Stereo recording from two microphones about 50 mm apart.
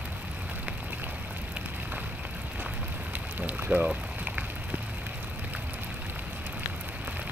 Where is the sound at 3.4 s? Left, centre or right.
Right.